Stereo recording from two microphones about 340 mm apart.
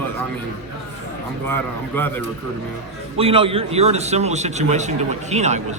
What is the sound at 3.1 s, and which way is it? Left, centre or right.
A man's voice, centre.